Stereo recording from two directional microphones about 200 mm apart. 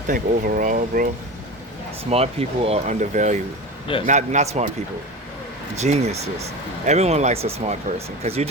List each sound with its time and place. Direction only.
0.1 s speech: 45° right (ahead or behind)
2.0 s speech: 30° right (ahead or behind)
5.8 s speech: 30° right (ahead or behind)